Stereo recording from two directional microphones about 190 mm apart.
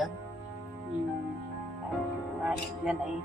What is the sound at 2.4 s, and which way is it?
Speech, 5° right (ahead or behind).